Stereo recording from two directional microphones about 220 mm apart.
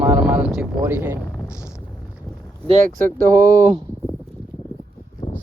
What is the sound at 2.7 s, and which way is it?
Speech, 35° right (ahead or behind).